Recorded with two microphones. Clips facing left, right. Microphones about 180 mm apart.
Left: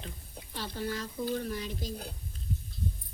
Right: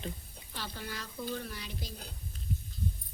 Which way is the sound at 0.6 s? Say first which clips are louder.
Left 6 dB; 40° left (ahead or behind).